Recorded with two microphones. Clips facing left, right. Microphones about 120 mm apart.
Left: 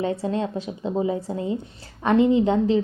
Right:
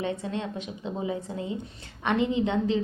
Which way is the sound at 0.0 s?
35° left (ahead or behind).